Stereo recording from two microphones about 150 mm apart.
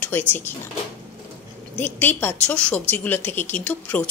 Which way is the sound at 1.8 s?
10° left (ahead or behind).